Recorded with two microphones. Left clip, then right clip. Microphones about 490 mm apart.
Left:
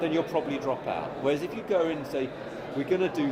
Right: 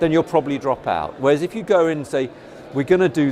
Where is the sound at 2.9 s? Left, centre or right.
Right.